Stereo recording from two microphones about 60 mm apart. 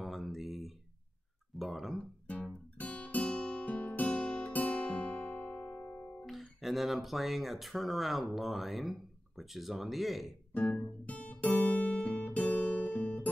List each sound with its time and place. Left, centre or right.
0.0 s a sound: centre
1.6 s speech: centre
2.8 s guitar: left
6.2 s speech: centre
10.5 s guitar: left